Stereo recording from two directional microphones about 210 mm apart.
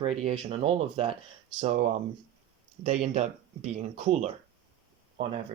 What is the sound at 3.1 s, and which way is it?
Speech, 30° right (ahead or behind).